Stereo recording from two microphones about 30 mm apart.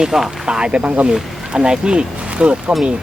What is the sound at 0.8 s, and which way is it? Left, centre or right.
Speech, right.